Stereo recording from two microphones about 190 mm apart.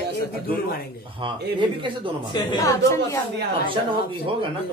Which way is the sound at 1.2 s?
25° right (ahead or behind).